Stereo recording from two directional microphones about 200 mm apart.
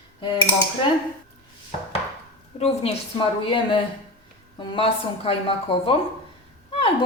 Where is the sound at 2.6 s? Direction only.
30° left (ahead or behind).